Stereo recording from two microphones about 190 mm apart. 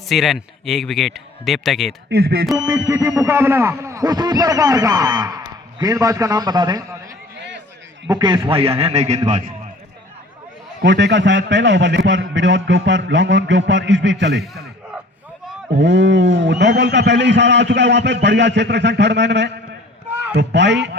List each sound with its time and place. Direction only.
0.1 s a man's voice: centre (ahead or behind)
2.0 s speech: 55° right (ahead or behind)
2.6 s a man's voice: 15° right (ahead or behind)
7.3 s a sound: 70° right (ahead or behind)
8.0 s a man's voice: 20° right (ahead or behind); by 9.4 s 40° right (ahead or behind)
10.8 s a man's voice: 70° right (ahead or behind)
14.4 s a sound: centre (ahead or behind)
15.8 s a man's voice: 75° right (ahead or behind)